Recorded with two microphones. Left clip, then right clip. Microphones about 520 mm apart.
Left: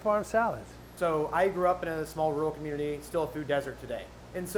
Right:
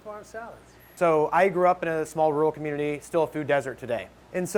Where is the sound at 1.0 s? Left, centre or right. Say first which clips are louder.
Right 6 dB; right.